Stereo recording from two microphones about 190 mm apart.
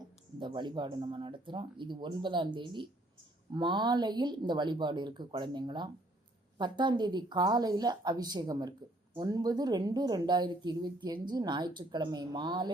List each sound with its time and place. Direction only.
0.3 s a woman's voice: 25° right (ahead or behind)